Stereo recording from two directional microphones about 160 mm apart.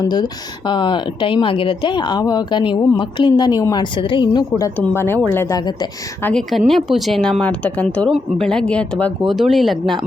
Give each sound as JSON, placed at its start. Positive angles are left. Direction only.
{"t": 0.0, "sound": "speech", "side_deg": 25}
{"t": 6.2, "sound": "speech", "side_deg": 5}